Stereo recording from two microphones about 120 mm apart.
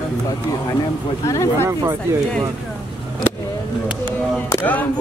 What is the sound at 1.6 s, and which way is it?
Speech, 30° right (ahead or behind).